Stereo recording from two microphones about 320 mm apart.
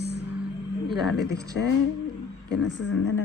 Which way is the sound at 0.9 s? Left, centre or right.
Centre.